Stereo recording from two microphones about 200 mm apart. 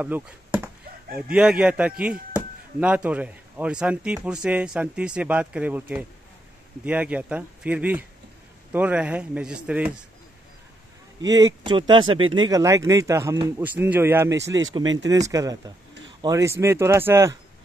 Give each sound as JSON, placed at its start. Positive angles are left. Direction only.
{"t": 0.0, "sound": "a man's voice", "side_deg": -5}
{"t": 11.2, "sound": "speech", "side_deg": -20}